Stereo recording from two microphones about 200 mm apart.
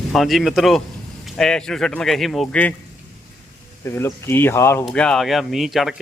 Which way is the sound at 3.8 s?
10° left (ahead or behind).